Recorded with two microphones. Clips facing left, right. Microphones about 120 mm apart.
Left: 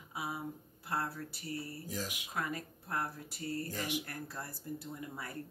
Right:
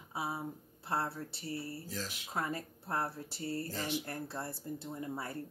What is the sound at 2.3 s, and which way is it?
Speech, 30° right (ahead or behind).